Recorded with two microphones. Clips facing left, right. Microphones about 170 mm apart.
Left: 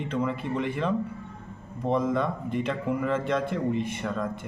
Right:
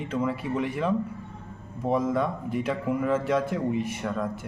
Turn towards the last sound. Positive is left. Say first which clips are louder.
# right 1 dB
turn(degrees=-5)  # may be behind; listen again after turning